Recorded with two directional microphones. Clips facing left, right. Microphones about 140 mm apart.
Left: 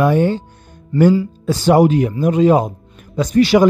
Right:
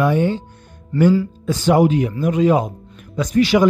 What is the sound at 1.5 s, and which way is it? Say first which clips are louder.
Speech: left 3 dB; 35° left (ahead or behind).